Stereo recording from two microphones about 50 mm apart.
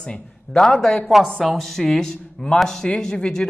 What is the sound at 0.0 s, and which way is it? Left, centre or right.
A man's voice, centre.